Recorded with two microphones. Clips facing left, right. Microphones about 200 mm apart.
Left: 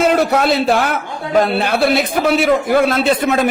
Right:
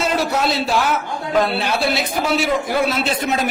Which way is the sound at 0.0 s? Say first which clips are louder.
Left 6 dB; 60° left (ahead or behind).